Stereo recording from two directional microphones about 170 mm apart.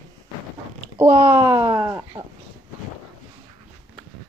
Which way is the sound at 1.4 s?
20° right (ahead or behind).